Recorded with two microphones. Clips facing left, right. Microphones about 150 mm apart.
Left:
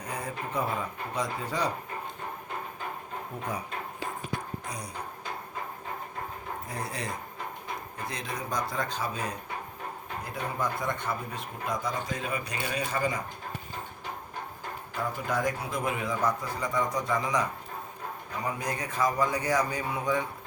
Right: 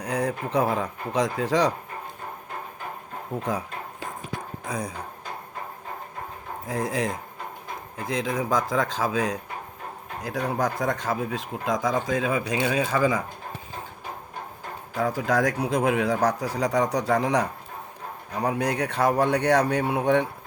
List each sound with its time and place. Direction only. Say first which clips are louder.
0.0 s speech: right 8 dB; 70° right (ahead or behind); by 1.7 s 90° right
3.3 s speech: right 11 dB; 90° right
6.7 s speech: right 11 dB; 90° right
14.9 s a man's voice: right 7 dB; 90° right; by 20.2 s 65° right (ahead or behind)